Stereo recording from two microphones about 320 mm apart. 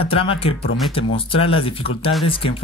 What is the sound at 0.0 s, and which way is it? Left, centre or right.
Speech, centre.